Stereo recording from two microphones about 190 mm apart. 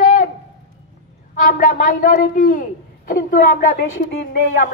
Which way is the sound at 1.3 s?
45° left (ahead or behind).